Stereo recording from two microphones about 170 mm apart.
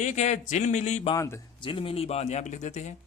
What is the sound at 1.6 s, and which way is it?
Speech, 30° left (ahead or behind).